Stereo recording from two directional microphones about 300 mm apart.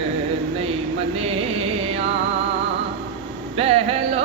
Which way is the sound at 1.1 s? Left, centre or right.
Centre.